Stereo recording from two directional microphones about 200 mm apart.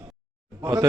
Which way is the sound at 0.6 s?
15° right (ahead or behind).